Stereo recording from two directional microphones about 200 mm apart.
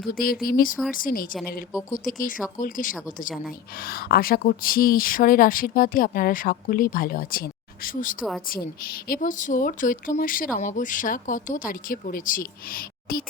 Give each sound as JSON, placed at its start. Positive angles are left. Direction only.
{"t": 0.1, "sound": "speech", "side_deg": 50}